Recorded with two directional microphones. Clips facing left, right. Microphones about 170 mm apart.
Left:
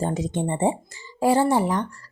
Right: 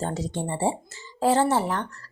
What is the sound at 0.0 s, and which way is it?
A woman's voice, 20° left (ahead or behind).